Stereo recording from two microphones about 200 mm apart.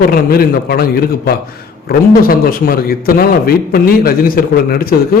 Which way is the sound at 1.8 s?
45° left (ahead or behind).